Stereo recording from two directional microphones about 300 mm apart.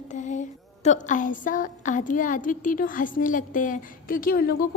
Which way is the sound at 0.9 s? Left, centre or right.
Left.